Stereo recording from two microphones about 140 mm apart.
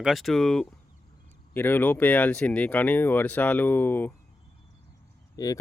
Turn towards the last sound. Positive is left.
turn(degrees=25)  # may be behind; listen again after turning